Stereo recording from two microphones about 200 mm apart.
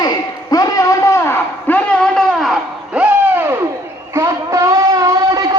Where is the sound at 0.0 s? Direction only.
20° left (ahead or behind).